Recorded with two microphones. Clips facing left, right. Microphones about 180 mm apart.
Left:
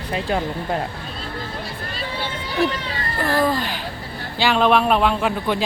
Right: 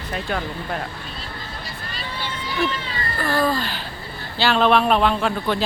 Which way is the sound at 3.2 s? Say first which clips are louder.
Left 1 dB; 15° left (ahead or behind).